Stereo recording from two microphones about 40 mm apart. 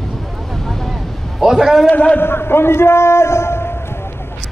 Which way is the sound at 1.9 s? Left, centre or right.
Left.